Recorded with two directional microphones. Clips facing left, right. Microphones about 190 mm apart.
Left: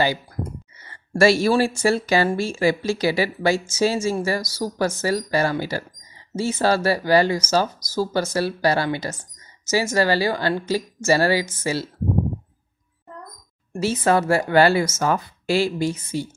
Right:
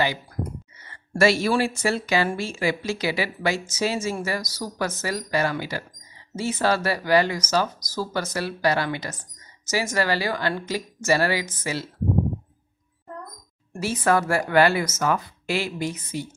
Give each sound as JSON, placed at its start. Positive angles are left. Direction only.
{"t": 1.1, "sound": "speech", "side_deg": 35}
{"t": 13.7, "sound": "speech", "side_deg": 25}